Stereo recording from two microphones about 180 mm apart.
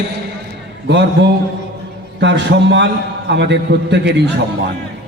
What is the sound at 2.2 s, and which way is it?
A man's voice, 75° right (ahead or behind).